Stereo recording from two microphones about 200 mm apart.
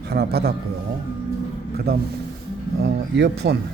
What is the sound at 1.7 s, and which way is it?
A man's voice, 50° right (ahead or behind).